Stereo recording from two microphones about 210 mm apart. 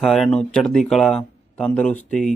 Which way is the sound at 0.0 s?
Centre (ahead or behind).